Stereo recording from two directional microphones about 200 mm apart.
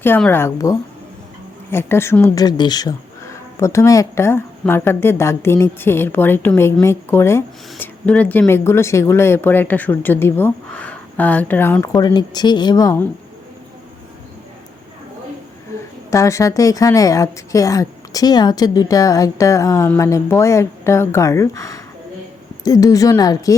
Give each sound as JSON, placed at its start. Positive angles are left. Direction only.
{"t": 0.0, "sound": "speech", "side_deg": 10}
{"t": 16.0, "sound": "speech", "side_deg": 15}